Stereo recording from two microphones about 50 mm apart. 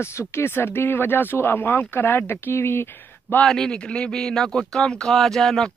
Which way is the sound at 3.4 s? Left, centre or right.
Centre.